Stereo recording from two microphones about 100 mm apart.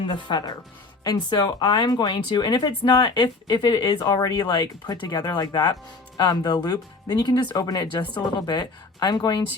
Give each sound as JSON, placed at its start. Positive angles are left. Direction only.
{"t": 0.0, "sound": "speech", "side_deg": 50}